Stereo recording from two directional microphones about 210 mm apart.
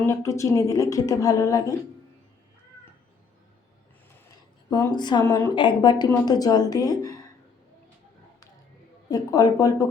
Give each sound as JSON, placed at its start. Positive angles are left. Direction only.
{"t": 0.0, "sound": "a woman's voice", "side_deg": 15}
{"t": 4.8, "sound": "a woman's voice", "side_deg": 20}
{"t": 9.0, "sound": "a woman's voice", "side_deg": 20}